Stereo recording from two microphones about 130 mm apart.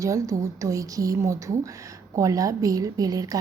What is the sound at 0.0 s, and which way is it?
A woman's voice, 25° right (ahead or behind).